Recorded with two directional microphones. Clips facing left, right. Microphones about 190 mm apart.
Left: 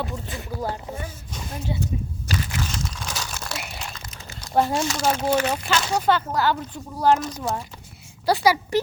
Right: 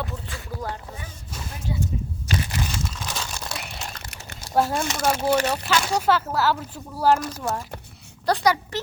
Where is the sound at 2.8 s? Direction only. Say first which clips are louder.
Even; 5° right (ahead or behind).